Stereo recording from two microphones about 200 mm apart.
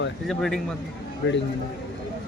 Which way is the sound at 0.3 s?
Centre (ahead or behind).